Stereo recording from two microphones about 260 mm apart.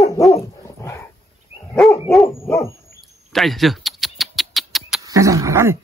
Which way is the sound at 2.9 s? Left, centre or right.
Centre.